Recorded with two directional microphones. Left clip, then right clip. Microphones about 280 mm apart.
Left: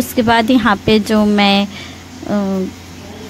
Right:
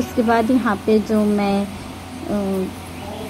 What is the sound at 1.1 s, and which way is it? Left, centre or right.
Speech, left.